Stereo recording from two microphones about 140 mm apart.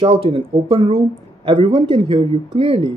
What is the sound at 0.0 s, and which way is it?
Speech, 45° right (ahead or behind).